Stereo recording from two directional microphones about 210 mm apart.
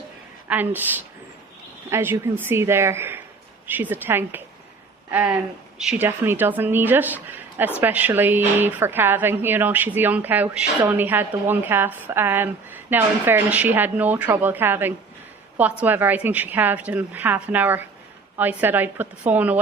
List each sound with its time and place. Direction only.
0.4 s a woman's voice: 10° right (ahead or behind)